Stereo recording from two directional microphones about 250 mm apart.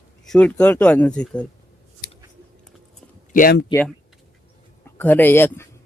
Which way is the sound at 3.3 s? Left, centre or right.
Left.